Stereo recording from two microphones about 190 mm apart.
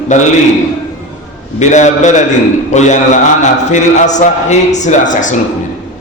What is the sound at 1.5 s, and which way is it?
A man's voice, 40° left (ahead or behind).